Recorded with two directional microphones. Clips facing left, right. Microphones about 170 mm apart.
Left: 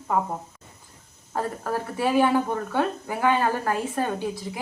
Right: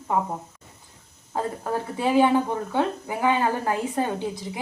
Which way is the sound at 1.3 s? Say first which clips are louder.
Right 1 dB; 20° right (ahead or behind).